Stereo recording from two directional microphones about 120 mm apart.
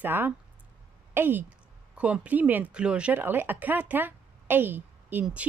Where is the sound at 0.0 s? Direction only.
15° right (ahead or behind).